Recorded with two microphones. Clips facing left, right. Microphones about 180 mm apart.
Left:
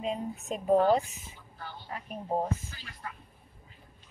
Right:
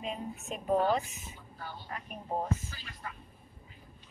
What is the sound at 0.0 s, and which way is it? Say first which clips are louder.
A woman's voice: left 5 dB; 30° left (ahead or behind).